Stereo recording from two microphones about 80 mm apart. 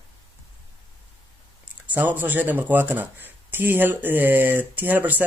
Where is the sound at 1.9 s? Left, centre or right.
Right.